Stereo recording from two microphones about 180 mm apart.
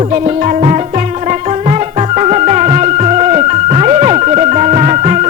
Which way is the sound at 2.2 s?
40° right (ahead or behind).